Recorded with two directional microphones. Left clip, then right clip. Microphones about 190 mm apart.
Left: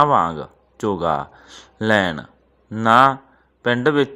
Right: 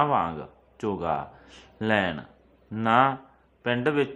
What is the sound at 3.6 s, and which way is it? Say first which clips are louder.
Speech: left 7 dB; 30° left (ahead or behind).